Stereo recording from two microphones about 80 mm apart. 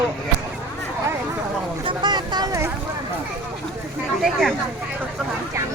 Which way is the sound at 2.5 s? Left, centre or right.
Right.